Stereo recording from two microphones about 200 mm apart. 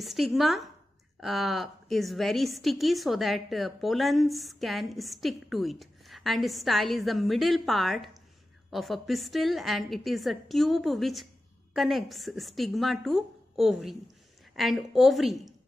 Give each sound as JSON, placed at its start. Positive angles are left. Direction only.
{"t": 0.0, "sound": "a woman's voice", "side_deg": 0}